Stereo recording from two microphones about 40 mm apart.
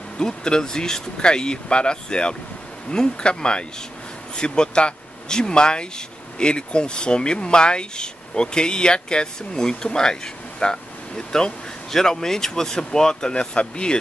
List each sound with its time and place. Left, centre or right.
0.2 s speech: centre